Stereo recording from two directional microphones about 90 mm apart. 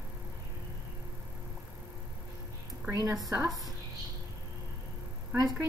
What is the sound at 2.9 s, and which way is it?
Speech, 40° right (ahead or behind).